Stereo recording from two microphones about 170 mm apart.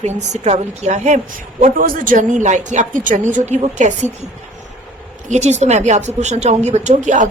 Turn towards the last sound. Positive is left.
turn(degrees=-45)  # may be behind; listen again after turning